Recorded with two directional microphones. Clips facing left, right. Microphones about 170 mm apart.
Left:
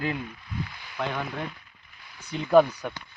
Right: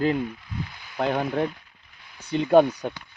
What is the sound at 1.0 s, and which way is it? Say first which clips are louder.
Speech: right 7 dB; 40° right (ahead or behind).